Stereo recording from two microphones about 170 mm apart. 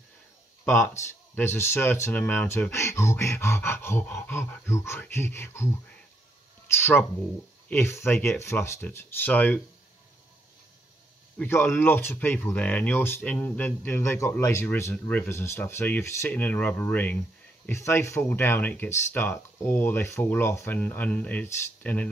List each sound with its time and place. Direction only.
0.7 s speech: 15° left (ahead or behind)
11.3 s speech: 10° left (ahead or behind)